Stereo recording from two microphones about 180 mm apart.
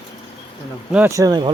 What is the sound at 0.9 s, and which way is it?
Speech, 10° right (ahead or behind).